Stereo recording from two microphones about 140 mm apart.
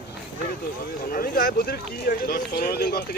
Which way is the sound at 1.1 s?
90° left.